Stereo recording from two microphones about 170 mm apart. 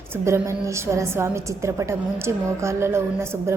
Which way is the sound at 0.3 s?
15° right (ahead or behind).